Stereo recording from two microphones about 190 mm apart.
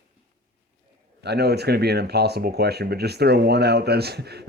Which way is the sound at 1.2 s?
60° right (ahead or behind).